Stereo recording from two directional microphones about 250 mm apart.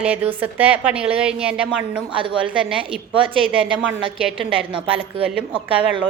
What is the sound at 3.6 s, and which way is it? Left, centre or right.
A woman's voice, centre.